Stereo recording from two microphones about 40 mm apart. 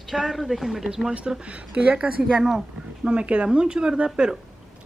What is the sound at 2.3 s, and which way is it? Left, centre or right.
Speech, centre.